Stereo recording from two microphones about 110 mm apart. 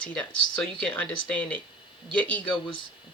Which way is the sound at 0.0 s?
10° left (ahead or behind).